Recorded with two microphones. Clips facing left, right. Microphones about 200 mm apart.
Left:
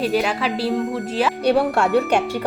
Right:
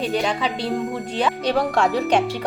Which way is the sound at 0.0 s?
5° left (ahead or behind).